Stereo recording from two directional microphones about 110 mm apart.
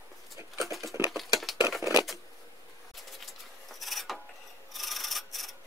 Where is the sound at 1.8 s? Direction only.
25° right (ahead or behind).